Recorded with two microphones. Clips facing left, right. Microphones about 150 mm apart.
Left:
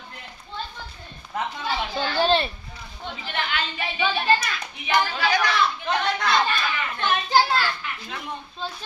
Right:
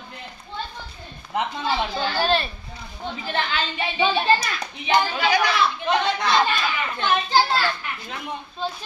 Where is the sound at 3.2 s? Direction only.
35° right (ahead or behind); by 5.4 s 20° right (ahead or behind).